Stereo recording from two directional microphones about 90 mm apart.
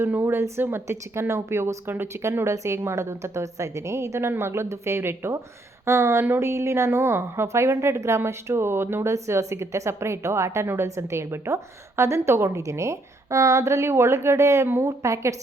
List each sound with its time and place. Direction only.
0.0 s a woman's voice: 25° right (ahead or behind)